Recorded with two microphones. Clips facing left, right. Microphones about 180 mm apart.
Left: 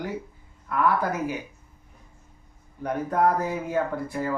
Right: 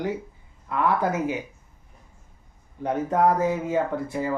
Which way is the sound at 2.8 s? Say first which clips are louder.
Right 2 dB; 20° right (ahead or behind).